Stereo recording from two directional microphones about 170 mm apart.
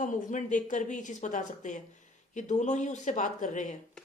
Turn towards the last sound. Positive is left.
turn(degrees=45)  # may be behind; listen again after turning